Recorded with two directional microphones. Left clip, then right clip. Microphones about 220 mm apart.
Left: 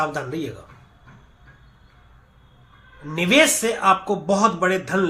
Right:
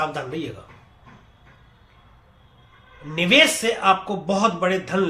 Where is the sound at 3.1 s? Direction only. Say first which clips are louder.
Right 1 dB; 20° left (ahead or behind).